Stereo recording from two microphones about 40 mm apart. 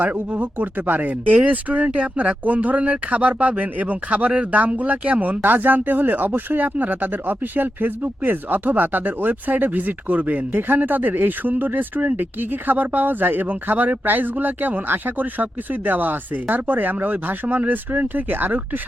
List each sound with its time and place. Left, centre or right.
0.0 s speech: right